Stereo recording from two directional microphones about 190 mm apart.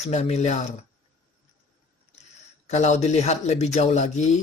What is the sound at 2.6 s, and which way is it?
Speech, 35° left (ahead or behind).